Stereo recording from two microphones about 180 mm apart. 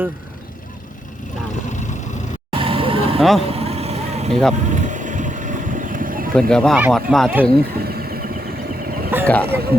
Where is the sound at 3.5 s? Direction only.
35° right (ahead or behind).